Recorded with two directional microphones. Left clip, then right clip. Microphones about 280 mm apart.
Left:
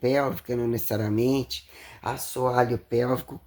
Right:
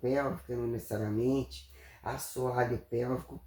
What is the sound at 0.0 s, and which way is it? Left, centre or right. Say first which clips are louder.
Speech: left 7 dB; left.